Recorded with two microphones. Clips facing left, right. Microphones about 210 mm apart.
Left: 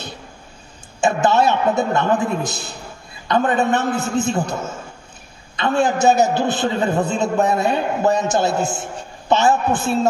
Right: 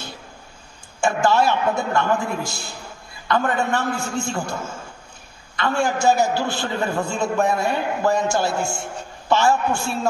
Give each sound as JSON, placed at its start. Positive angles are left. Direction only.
{"t": 1.0, "sound": "a man's voice", "side_deg": 20}